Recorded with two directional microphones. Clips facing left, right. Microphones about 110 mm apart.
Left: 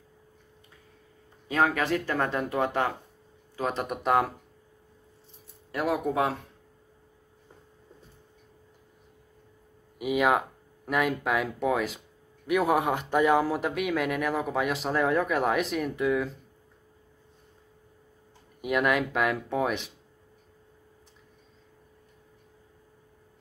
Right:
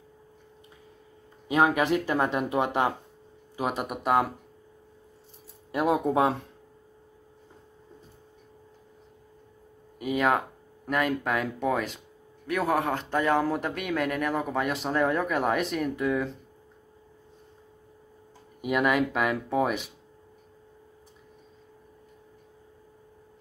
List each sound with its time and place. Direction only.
1.5 s speech: 15° right (ahead or behind)
5.7 s speech: 20° right (ahead or behind)
9.9 s speech: 5° left (ahead or behind)
12.4 s speech: 15° left (ahead or behind)
18.6 s speech: centre (ahead or behind)